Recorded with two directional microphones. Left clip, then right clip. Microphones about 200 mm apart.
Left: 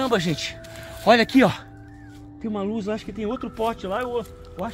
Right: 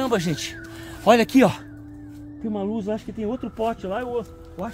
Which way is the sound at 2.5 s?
5° right (ahead or behind).